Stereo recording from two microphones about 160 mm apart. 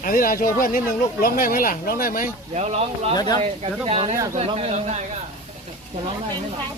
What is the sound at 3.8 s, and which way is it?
Speech, 35° right (ahead or behind).